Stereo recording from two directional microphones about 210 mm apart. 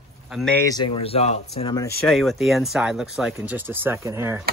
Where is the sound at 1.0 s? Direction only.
30° left (ahead or behind).